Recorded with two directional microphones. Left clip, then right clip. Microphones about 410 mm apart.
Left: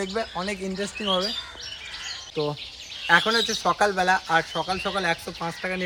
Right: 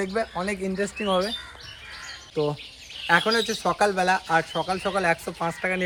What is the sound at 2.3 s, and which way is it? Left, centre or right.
Speech, centre.